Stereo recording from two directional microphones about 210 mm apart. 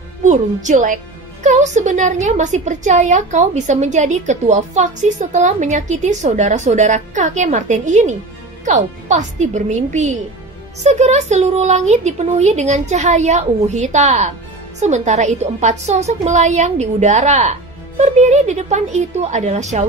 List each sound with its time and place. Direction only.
0.2 s a woman's voice: 35° right (ahead or behind)